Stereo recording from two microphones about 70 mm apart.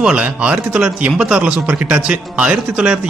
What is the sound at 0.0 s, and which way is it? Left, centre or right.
Speech, centre.